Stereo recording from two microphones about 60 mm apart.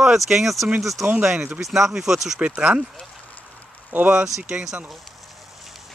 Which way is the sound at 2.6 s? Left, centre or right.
Centre.